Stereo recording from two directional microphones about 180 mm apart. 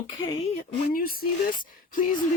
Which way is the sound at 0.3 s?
30° left (ahead or behind).